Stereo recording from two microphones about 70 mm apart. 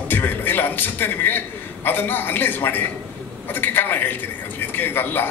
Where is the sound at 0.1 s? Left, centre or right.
Left.